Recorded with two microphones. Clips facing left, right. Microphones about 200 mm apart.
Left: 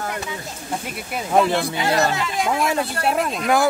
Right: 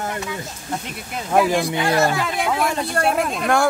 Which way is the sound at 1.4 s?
10° right (ahead or behind).